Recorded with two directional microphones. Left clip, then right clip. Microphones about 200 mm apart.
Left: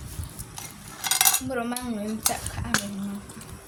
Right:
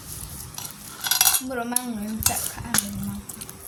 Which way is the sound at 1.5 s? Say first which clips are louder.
Even; 30° left (ahead or behind).